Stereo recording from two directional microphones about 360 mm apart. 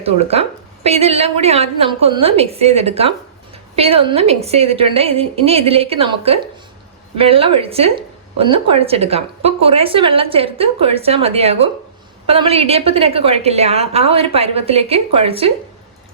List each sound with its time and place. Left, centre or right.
0.0 s a woman's voice: centre